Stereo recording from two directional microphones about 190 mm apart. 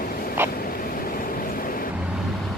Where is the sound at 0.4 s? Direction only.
15° right (ahead or behind).